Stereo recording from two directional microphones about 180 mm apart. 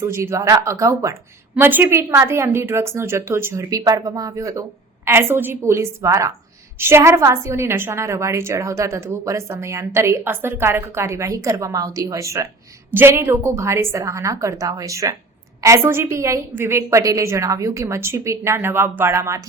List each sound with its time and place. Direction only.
0.0 s a woman's voice: 15° right (ahead or behind)